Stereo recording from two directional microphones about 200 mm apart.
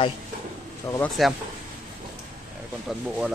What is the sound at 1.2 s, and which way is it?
Speech, centre (ahead or behind).